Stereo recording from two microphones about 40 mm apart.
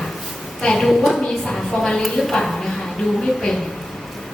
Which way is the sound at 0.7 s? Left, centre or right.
Centre.